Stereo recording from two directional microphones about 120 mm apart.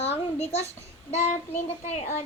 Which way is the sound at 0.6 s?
70° left (ahead or behind).